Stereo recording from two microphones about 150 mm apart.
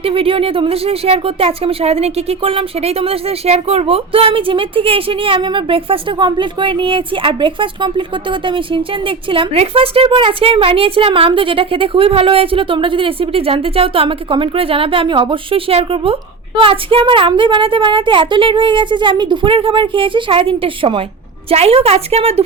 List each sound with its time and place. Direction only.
0.0 s a woman's voice: 40° right (ahead or behind)